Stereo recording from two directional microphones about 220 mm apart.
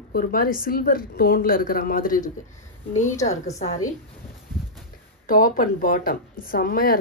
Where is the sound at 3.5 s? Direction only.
30° left (ahead or behind).